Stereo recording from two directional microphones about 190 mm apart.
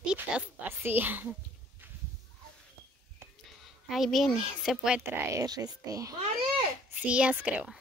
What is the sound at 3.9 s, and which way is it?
Speech, centre (ahead or behind).